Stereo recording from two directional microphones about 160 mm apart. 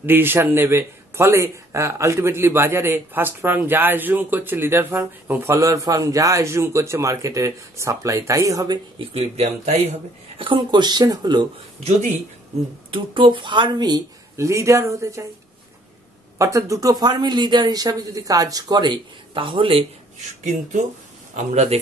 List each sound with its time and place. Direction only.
0.0 s a man's voice: 15° right (ahead or behind)
9.1 s speech: 40° right (ahead or behind)
10.4 s speech: 30° right (ahead or behind)
12.9 s speech: 30° right (ahead or behind)
16.3 s speech: 20° right (ahead or behind); by 19.9 s 35° right (ahead or behind)
21.4 s speech: 45° right (ahead or behind)